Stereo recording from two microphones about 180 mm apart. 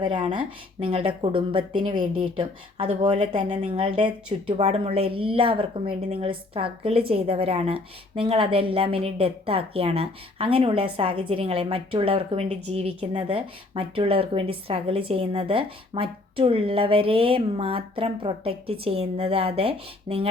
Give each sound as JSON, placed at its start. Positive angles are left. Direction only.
{"t": 0.0, "sound": "a woman's voice", "side_deg": -25}